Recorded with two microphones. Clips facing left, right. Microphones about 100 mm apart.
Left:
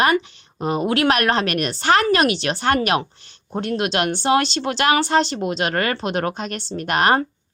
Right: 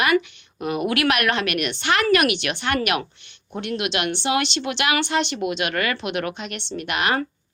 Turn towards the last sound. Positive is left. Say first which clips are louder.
# left 5 dB
turn(degrees=40)  # may be behind; listen again after turning